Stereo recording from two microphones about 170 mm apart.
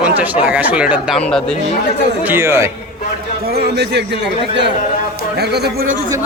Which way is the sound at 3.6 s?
80° right.